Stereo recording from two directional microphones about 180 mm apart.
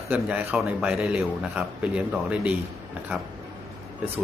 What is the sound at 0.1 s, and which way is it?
A man's voice, 5° right (ahead or behind).